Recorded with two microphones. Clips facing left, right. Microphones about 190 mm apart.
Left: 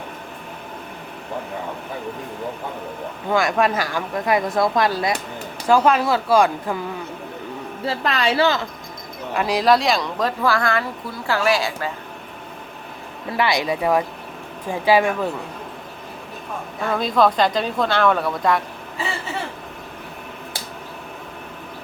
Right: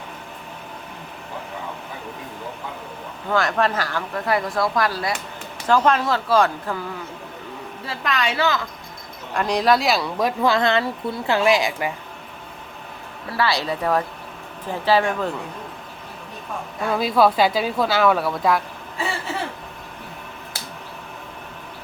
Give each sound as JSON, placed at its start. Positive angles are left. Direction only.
{"t": 3.2, "sound": "speech", "side_deg": 10}
{"t": 5.6, "sound": "speech", "side_deg": 10}
{"t": 7.9, "sound": "a woman's voice", "side_deg": 30}
{"t": 9.3, "sound": "speech", "side_deg": 5}
{"t": 13.3, "sound": "speech", "side_deg": 15}
{"t": 16.8, "sound": "speech", "side_deg": -5}